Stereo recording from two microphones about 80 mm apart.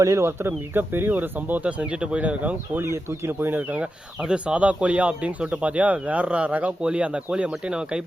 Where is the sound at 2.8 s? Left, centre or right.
Right; by 8.0 s centre.